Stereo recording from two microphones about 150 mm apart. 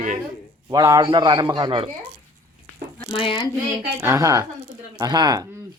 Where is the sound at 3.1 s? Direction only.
35° left (ahead or behind).